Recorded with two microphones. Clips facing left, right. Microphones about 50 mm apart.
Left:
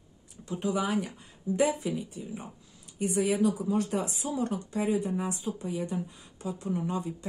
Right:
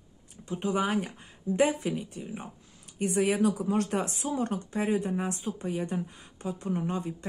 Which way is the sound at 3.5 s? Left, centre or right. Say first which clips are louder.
Right 1 dB; right.